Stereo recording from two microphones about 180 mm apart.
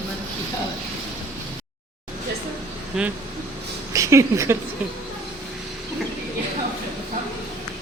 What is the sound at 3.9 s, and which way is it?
Speech, 15° right (ahead or behind).